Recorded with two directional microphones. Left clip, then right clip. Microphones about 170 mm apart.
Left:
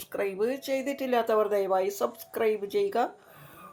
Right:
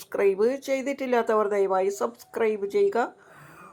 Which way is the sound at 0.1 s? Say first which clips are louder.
Right 7 dB; 25° right (ahead or behind).